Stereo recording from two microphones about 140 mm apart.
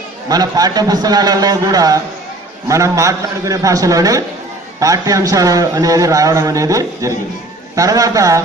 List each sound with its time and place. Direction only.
0.3 s a man's voice: 25° right (ahead or behind)